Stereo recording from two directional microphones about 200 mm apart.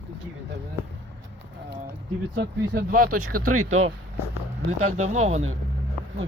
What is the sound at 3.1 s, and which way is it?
Speech, 90° right.